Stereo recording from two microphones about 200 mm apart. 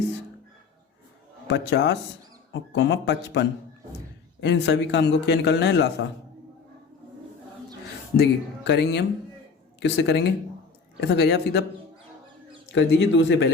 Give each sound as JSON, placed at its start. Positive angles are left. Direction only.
{"t": 1.5, "sound": "a man's voice", "side_deg": 60}
{"t": 8.1, "sound": "a man's voice", "side_deg": 55}
{"t": 12.7, "sound": "a man's voice", "side_deg": 60}